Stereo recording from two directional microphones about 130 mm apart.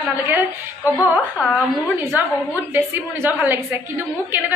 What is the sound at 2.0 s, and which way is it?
A woman's voice, 15° right (ahead or behind).